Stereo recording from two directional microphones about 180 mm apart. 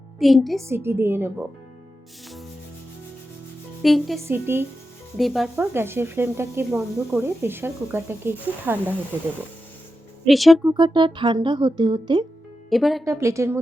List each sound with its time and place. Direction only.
0.2 s speech: centre (ahead or behind)
0.6 s speech: 15° right (ahead or behind)
3.8 s speech: centre (ahead or behind)
4.3 s speech: 15° right (ahead or behind)
5.1 s speech: centre (ahead or behind)
5.7 s speech: 15° right (ahead or behind)
10.2 s speech: centre (ahead or behind)
10.8 s speech: 25° right (ahead or behind)
12.7 s speech: centre (ahead or behind)
13.1 s speech: 15° right (ahead or behind)